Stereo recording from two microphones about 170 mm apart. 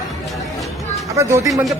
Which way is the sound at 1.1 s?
20° right (ahead or behind).